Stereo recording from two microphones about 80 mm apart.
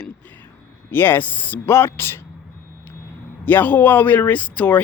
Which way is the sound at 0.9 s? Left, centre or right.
Left.